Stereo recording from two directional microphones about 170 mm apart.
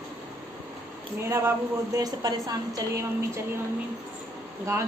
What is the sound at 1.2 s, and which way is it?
A woman's voice, 15° right (ahead or behind).